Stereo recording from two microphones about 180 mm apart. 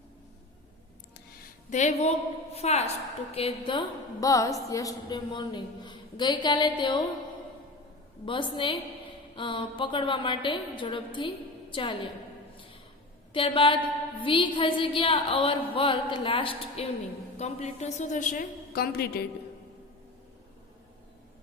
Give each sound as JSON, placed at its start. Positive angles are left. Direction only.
{"t": 1.7, "sound": "speech", "side_deg": 40}
{"t": 3.7, "sound": "a woman's voice", "side_deg": 25}
{"t": 8.2, "sound": "a woman's voice", "side_deg": 30}
{"t": 13.3, "sound": "a woman's voice", "side_deg": 30}